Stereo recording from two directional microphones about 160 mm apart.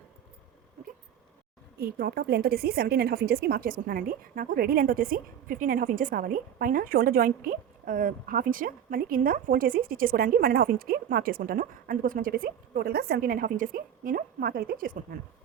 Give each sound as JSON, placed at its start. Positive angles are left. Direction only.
{"t": 1.8, "sound": "a woman's voice", "side_deg": -75}